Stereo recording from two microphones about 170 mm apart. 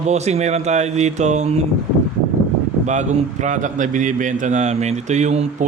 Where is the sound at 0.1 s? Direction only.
40° right (ahead or behind).